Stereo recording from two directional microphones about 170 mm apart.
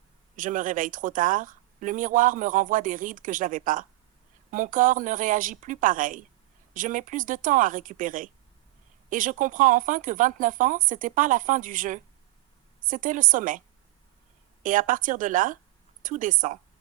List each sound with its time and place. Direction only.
0.3 s speech: 50° right (ahead or behind)
14.6 s speech: 50° right (ahead or behind)